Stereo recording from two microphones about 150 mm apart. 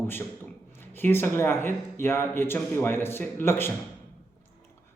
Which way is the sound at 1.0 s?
15° left (ahead or behind).